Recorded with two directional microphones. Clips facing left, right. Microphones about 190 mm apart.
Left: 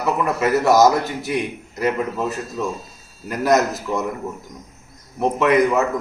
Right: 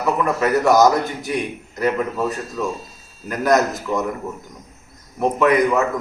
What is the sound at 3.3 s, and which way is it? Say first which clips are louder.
Speech: even; centre (ahead or behind).